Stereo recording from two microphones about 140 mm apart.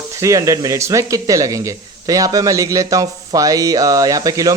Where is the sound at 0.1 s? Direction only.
25° right (ahead or behind).